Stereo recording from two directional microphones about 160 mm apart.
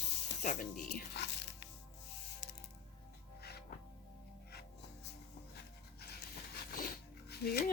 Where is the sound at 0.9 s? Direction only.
90° left.